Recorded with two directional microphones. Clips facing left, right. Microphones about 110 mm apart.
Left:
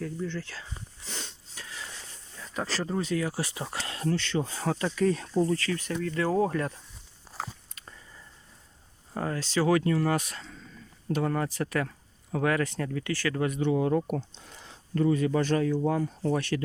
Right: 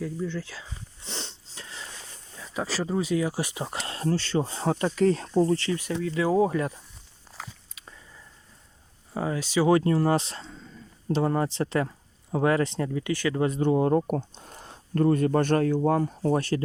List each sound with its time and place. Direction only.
0.0 s speech: 10° right (ahead or behind)
1.0 s wheeze: 25° right (ahead or behind)
2.4 s speech: 5° right (ahead or behind); by 5.7 s 30° right (ahead or behind)
6.0 s speech: 10° right (ahead or behind)
7.3 s a sound: 10° left (ahead or behind)
7.8 s a sound: centre (ahead or behind)
9.1 s speech: 10° right (ahead or behind)
9.6 s speech: 30° right (ahead or behind)
13.5 s speech: 40° right (ahead or behind)
16.3 s speech: 35° right (ahead or behind)